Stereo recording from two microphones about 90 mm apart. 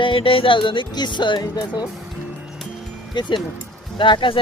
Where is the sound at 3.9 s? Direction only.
65° left (ahead or behind).